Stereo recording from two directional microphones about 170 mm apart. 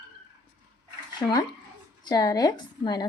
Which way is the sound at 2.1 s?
20° left (ahead or behind).